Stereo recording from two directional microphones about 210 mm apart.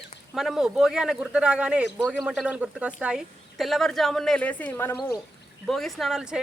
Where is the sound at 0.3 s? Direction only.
Centre (ahead or behind).